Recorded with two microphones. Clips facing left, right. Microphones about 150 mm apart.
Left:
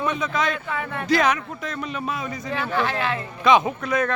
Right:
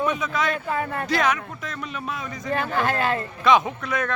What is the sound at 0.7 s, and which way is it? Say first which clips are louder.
Speech: right 3 dB; 40° right (ahead or behind).